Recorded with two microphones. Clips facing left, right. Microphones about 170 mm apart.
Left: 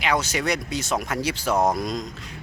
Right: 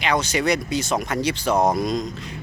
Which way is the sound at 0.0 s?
5° left (ahead or behind).